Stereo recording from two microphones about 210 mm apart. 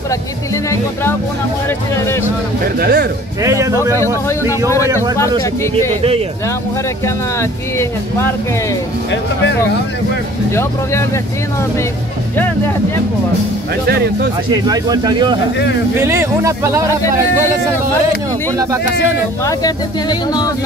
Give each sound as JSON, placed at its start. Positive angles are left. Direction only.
{"t": 2.8, "sound": "speech", "side_deg": -45}
{"t": 3.4, "sound": "speech", "side_deg": -15}
{"t": 5.4, "sound": "speech", "side_deg": 10}
{"t": 7.3, "sound": "speech", "side_deg": 10}
{"t": 10.5, "sound": "speech", "side_deg": 10}
{"t": 13.8, "sound": "speech", "side_deg": -50}
{"t": 14.5, "sound": "speech", "side_deg": -20}
{"t": 19.4, "sound": "speech", "side_deg": 20}